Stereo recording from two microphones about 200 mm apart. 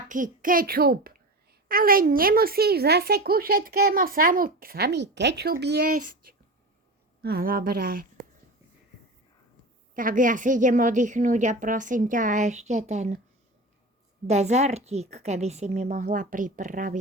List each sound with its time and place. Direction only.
0.1 s a child's voice: 40° right (ahead or behind)
9.9 s a woman's voice: 45° right (ahead or behind)
14.3 s a woman's voice: 35° right (ahead or behind)